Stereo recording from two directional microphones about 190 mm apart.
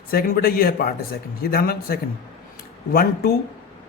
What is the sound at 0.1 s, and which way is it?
Speech, 50° left (ahead or behind).